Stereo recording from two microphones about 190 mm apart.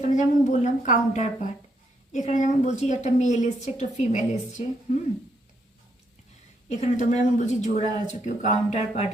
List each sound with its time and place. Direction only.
0.0 s a woman's voice: 40° left (ahead or behind)
6.7 s a woman's voice: 40° left (ahead or behind)